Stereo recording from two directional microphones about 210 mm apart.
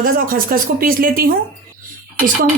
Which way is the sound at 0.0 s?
45° right (ahead or behind).